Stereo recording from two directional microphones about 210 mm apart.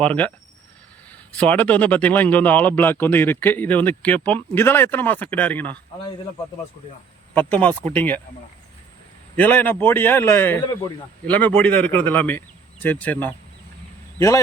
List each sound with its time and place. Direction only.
0.0 s speech: 5° left (ahead or behind)
1.4 s speech: 5° left (ahead or behind)
7.3 s speech: 5° left (ahead or behind)
9.3 s speech: 10° left (ahead or behind)